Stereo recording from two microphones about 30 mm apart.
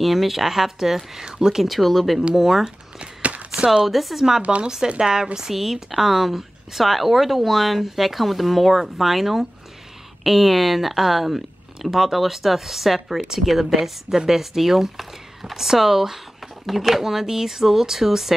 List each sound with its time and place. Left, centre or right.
0.0 s a woman's voice: centre; by 1.6 s right
1.6 s speech: centre
3.0 s walk: right
3.5 s speech: right
3.8 s speech: centre
4.4 s speech: right
4.6 s a woman's voice: right; by 18.3 s centre